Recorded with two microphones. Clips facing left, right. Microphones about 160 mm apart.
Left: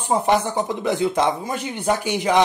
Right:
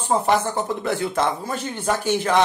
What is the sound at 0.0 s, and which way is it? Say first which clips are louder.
Speech: left 1 dB; 15° left (ahead or behind).